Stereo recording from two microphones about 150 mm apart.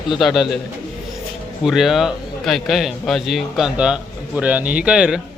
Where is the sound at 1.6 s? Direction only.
Centre (ahead or behind).